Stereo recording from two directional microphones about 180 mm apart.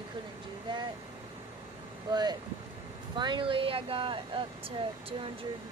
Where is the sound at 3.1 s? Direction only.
25° right (ahead or behind).